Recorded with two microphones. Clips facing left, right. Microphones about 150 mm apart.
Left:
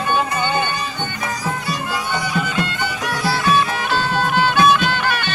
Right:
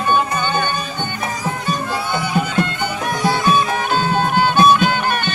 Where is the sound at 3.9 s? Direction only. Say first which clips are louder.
Right 2 dB; 50° right (ahead or behind).